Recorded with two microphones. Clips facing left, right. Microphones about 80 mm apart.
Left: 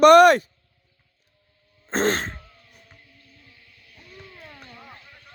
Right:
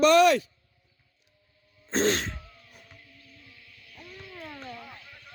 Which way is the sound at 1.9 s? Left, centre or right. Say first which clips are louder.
Left 3 dB; left.